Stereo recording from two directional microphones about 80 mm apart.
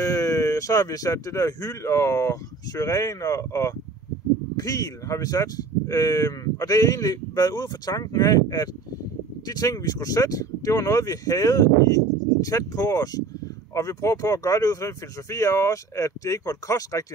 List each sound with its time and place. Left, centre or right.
0.0 s speech: left